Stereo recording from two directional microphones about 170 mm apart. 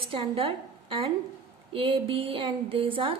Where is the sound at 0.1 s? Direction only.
30° right (ahead or behind).